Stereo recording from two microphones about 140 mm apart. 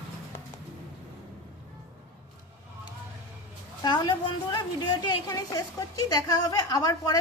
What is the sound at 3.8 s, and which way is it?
A woman's voice, 30° left (ahead or behind).